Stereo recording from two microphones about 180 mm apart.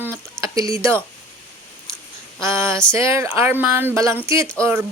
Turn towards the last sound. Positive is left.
turn(degrees=-15)  # may be behind; listen again after turning